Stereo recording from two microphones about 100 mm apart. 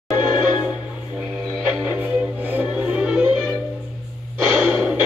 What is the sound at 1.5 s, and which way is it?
Music, 15° right (ahead or behind).